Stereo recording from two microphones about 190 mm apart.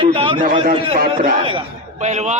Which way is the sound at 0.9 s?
50° right (ahead or behind).